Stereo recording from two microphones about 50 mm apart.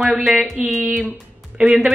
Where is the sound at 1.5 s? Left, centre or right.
Centre.